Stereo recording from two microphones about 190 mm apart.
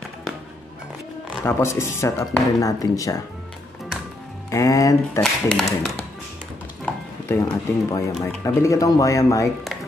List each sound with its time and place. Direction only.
1.4 s speech: 15° left (ahead or behind)
4.5 s speech: 15° left (ahead or behind)
5.2 s speech: centre (ahead or behind)
7.2 s speech: 10° left (ahead or behind)